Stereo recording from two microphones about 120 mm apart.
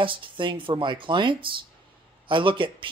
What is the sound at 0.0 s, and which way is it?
Speech, 45° right (ahead or behind).